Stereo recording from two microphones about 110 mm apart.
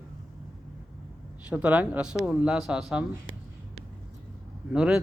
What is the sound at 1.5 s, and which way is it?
Speech, 15° right (ahead or behind).